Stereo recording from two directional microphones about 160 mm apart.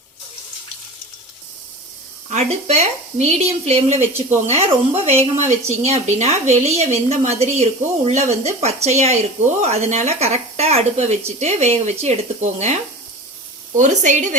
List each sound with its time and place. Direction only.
2.3 s speech: 45° right (ahead or behind)
13.7 s speech: 50° right (ahead or behind)